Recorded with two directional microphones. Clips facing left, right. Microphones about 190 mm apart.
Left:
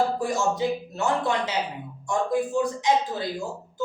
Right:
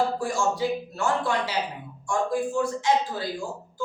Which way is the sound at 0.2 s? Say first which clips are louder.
Left 1 dB; 20° left (ahead or behind).